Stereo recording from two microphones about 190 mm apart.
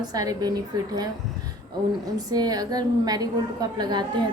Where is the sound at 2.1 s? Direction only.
20° right (ahead or behind).